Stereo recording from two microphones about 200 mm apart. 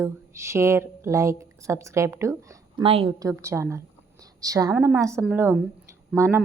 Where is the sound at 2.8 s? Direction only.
30° right (ahead or behind).